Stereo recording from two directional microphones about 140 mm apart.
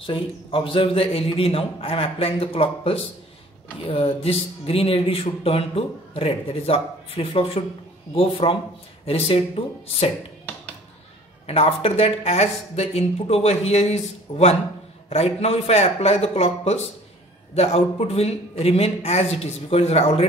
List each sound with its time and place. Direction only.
0.0 s speech: 40° left (ahead or behind)
11.4 s speech: 45° left (ahead or behind)